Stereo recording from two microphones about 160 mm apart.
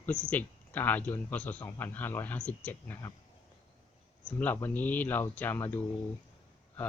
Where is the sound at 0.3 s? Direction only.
10° left (ahead or behind).